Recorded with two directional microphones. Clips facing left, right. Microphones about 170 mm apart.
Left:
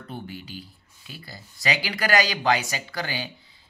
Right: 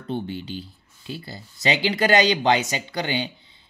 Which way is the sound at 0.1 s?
25° right (ahead or behind).